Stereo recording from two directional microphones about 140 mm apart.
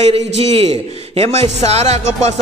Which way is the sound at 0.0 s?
45° right (ahead or behind).